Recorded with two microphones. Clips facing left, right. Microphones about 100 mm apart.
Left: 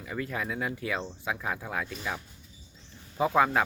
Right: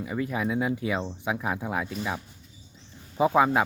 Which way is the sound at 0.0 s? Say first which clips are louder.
Right 5 dB; 15° right (ahead or behind).